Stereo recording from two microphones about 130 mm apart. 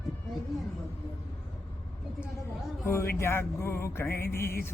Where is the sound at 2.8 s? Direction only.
20° left (ahead or behind).